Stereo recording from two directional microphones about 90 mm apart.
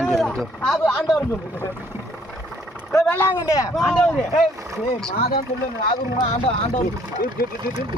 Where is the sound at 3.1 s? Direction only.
25° left (ahead or behind).